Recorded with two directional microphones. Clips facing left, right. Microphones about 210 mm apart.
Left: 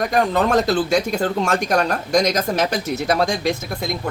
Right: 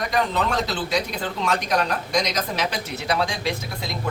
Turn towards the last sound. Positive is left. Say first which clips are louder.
# left 5 dB
turn(degrees=45)  # may be behind; listen again after turning